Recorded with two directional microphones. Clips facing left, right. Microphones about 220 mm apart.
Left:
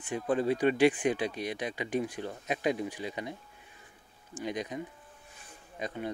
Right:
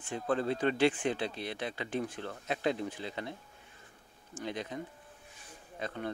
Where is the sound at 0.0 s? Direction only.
15° left (ahead or behind).